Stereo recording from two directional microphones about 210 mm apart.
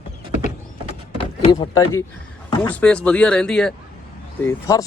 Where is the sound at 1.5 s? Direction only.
15° left (ahead or behind).